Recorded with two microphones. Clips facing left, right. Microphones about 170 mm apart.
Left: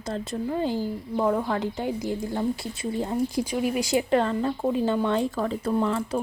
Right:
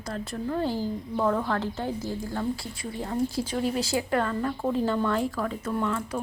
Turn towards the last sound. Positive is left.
turn(degrees=30)  # may be behind; listen again after turning